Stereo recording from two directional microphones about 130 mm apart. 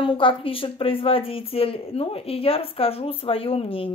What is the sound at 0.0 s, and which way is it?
Speech, 40° left (ahead or behind).